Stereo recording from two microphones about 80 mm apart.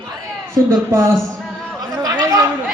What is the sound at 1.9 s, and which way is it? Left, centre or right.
Chatter, right.